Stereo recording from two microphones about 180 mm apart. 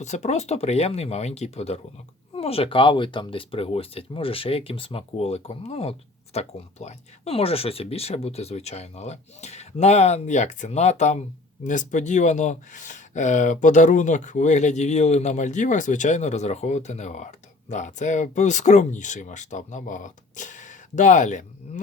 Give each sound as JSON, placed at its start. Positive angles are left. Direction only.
{"t": 0.0, "sound": "speech", "side_deg": 40}